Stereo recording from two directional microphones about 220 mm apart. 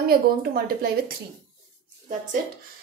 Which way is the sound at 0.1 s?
45° right (ahead or behind).